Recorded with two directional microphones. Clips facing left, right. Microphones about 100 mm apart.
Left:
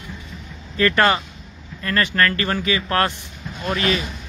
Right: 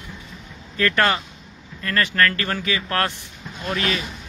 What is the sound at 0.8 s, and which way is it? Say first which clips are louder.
Speech: left 3 dB; 20° left (ahead or behind).